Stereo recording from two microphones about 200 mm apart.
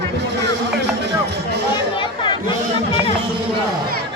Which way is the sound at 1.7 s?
25° left (ahead or behind).